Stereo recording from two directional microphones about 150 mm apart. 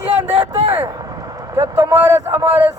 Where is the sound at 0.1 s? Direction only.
40° right (ahead or behind).